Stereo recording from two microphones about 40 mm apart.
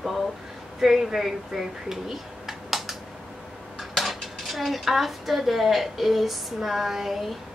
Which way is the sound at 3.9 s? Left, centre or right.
Centre.